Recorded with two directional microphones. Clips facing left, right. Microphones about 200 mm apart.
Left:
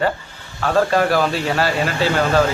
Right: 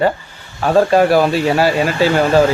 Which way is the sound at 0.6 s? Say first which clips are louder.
Right 5 dB; 15° right (ahead or behind).